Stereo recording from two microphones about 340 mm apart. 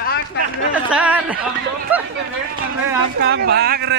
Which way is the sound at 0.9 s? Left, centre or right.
Centre.